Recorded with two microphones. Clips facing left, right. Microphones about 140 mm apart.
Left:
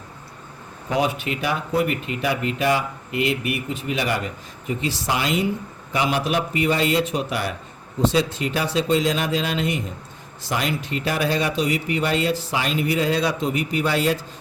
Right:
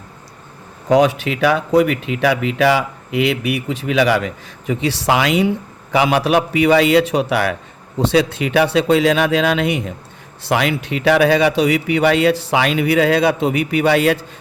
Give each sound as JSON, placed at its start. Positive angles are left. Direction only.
{"t": 0.9, "sound": "speech", "side_deg": -90}
{"t": 5.9, "sound": "speech", "side_deg": -90}